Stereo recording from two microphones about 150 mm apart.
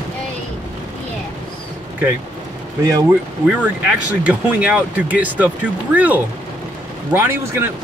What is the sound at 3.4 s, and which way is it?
Speech, 10° right (ahead or behind).